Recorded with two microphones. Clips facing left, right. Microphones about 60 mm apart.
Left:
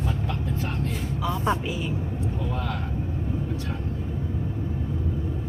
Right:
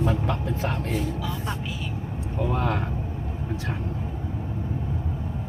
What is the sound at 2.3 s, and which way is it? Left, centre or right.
Speech, right.